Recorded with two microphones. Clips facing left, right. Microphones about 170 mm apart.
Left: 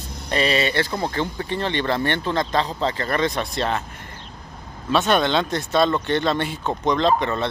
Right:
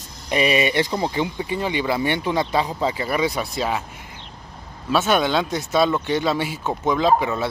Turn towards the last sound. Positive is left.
turn(degrees=-5)  # may be behind; listen again after turning